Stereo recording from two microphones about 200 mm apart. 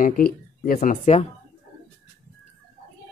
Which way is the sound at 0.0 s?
45° left (ahead or behind).